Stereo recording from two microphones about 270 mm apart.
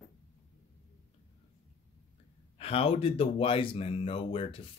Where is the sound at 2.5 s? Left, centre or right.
Left.